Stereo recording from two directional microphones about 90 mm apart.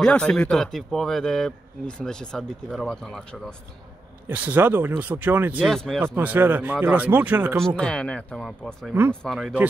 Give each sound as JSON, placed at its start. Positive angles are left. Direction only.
{"t": 0.0, "sound": "a man's voice", "side_deg": 10}
{"t": 4.3, "sound": "speech", "side_deg": -20}
{"t": 5.7, "sound": "speech", "side_deg": 5}
{"t": 5.9, "sound": "speech", "side_deg": -20}
{"t": 7.6, "sound": "a man's voice", "side_deg": 10}
{"t": 8.5, "sound": "speech", "side_deg": 0}